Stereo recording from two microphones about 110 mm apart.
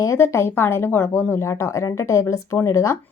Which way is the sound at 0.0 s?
25° left (ahead or behind).